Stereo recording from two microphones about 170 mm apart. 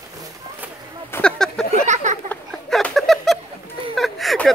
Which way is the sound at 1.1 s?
5° left (ahead or behind).